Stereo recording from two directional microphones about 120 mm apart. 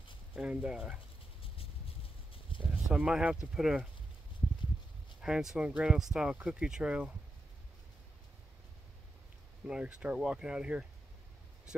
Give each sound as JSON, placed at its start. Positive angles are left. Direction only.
{"t": 0.4, "sound": "speech", "side_deg": -5}
{"t": 1.4, "sound": "a sound", "side_deg": 50}
{"t": 2.9, "sound": "speech", "side_deg": -5}
{"t": 5.2, "sound": "speech", "side_deg": -5}
{"t": 9.7, "sound": "speech", "side_deg": -10}